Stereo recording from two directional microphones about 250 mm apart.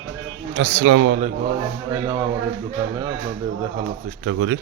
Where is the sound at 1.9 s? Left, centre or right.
Centre.